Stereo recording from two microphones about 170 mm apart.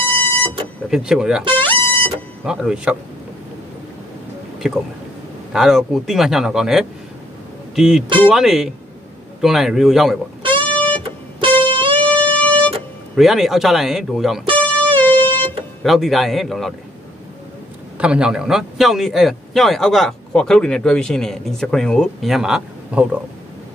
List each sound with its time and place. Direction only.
0.0 s vehicle: 10° left (ahead or behind)
0.8 s a man's voice: centre (ahead or behind)
1.5 s music: 10° left (ahead or behind)
2.4 s a man's voice: 5° right (ahead or behind)
4.6 s a man's voice: 5° right (ahead or behind)
10.7 s guitar: 10° left (ahead or behind)
11.6 s music: 30° right (ahead or behind)
12.0 s music: 10° left (ahead or behind)
13.1 s a man's voice: centre (ahead or behind)
14.6 s music: 10° left (ahead or behind)
15.8 s a man's voice: centre (ahead or behind)
17.9 s a man's voice: 5° right (ahead or behind)